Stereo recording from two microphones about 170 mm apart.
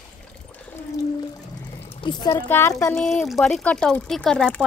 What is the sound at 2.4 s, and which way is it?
Speech, 15° left (ahead or behind).